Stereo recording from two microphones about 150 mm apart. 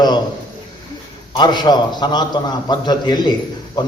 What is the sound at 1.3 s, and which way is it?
A man's voice, 30° left (ahead or behind).